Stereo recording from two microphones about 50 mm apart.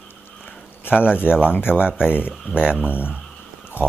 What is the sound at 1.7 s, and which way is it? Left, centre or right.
Speech, centre.